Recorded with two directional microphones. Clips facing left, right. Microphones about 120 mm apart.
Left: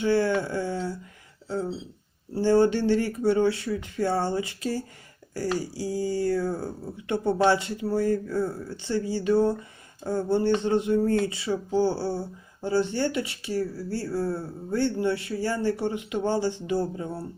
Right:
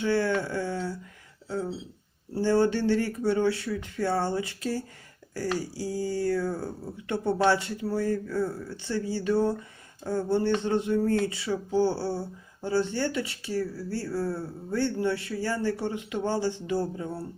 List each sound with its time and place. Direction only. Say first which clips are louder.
0.0 s a man's voice: left 3 dB; 15° left (ahead or behind)